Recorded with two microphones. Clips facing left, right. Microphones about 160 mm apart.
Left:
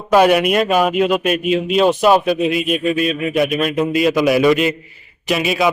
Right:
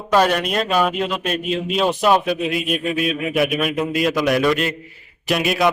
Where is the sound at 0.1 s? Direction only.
10° left (ahead or behind).